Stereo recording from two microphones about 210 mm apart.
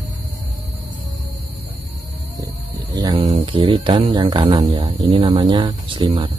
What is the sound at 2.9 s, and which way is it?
Speech, 20° right (ahead or behind).